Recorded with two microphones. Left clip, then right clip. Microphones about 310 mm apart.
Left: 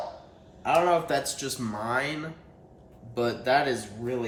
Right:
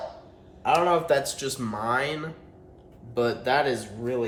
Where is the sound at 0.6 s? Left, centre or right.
Centre.